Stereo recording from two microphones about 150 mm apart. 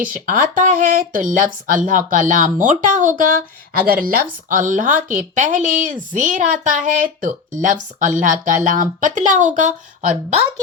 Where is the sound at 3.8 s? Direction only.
70° right (ahead or behind).